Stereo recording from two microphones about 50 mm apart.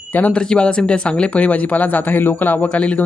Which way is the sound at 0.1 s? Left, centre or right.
Left.